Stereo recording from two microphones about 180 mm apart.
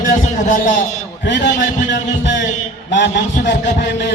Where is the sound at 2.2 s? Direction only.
75° left (ahead or behind).